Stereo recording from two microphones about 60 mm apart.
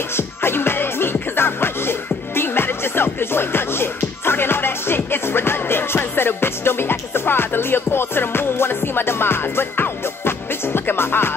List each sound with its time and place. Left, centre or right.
0.1 s music: left